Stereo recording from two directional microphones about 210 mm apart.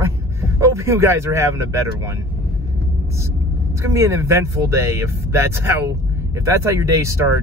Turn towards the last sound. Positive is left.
turn(degrees=-15)  # may be behind; listen again after turning